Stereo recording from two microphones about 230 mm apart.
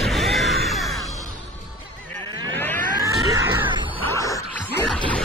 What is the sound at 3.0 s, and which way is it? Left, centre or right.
Cat, centre.